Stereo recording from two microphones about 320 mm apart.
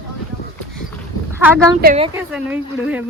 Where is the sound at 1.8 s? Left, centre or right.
Right.